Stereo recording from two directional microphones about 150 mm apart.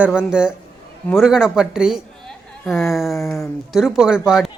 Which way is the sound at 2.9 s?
Centre (ahead or behind).